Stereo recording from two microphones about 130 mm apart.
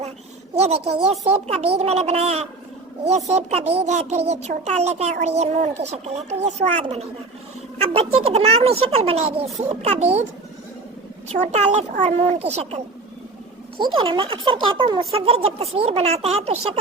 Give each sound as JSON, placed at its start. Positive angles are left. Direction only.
{"t": 0.5, "sound": "a child's voice", "side_deg": -55}
{"t": 11.3, "sound": "a child's voice", "side_deg": -60}
{"t": 13.7, "sound": "speech", "side_deg": -40}